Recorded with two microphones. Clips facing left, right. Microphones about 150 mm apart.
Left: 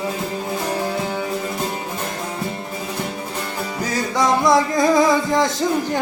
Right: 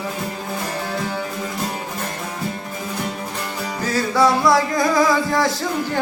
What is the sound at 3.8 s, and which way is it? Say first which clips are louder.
Music: right 2 dB; 15° left (ahead or behind).